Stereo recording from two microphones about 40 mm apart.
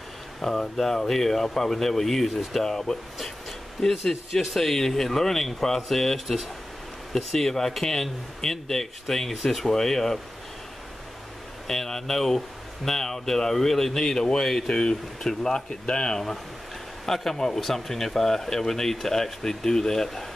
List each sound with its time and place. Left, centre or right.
0.4 s speech: centre
11.6 s speech: centre
17.0 s speech: centre